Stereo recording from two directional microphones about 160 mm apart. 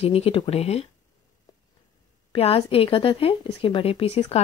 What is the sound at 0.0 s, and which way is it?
Speech, 35° left (ahead or behind).